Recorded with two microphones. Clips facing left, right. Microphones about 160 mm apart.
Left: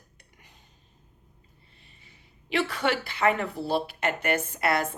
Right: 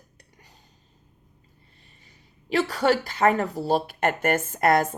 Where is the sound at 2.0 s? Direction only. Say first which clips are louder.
Right 1 dB; 40° right (ahead or behind).